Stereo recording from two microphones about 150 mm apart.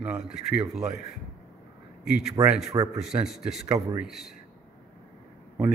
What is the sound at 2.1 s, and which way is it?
Speech, 5° right (ahead or behind).